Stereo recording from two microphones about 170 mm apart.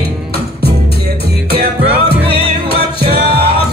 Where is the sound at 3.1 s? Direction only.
70° right (ahead or behind).